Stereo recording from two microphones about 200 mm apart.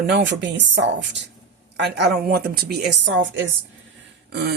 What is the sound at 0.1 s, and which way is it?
A woman's voice, 60° right (ahead or behind).